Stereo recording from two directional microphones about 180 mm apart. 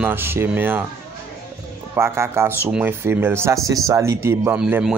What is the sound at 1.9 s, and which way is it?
Speech, 15° right (ahead or behind).